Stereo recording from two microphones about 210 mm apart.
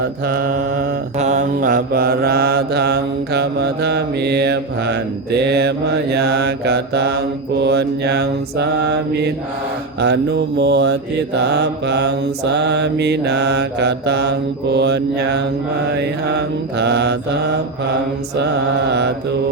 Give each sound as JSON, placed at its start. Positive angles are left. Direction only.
{"t": 0.3, "sound": "mantra", "side_deg": -45}
{"t": 16.7, "sound": "mantra", "side_deg": -55}